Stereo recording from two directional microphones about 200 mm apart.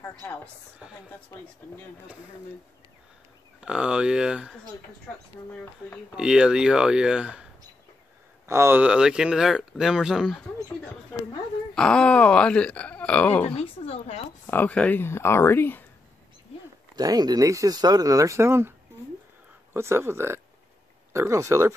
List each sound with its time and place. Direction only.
0.0 s a woman's voice: 10° left (ahead or behind)
3.6 s speech: 5° right (ahead or behind)
6.1 s speech: 5° right (ahead or behind)
8.5 s speech: 10° right (ahead or behind)
11.7 s speech: 5° left (ahead or behind)
13.6 s speech: 30° left (ahead or behind)
14.4 s speech: 10° left (ahead or behind)
16.9 s speech: 20° right (ahead or behind)
19.7 s speech: 10° right (ahead or behind)